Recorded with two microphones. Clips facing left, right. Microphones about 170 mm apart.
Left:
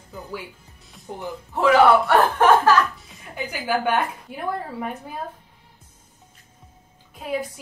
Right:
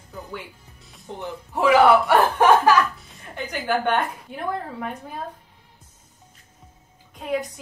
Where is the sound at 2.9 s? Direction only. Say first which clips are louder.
Left 1 dB; 5° left (ahead or behind).